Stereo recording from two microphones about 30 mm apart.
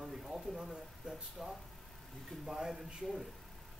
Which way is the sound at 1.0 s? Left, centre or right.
Centre.